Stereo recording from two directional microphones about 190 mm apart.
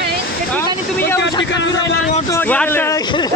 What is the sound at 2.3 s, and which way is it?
Speech, 10° left (ahead or behind).